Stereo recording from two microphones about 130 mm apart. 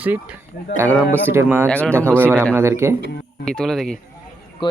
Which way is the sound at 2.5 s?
20° right (ahead or behind).